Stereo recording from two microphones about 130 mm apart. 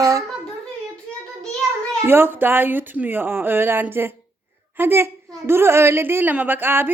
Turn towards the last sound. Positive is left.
turn(degrees=-15)  # may be behind; listen again after turning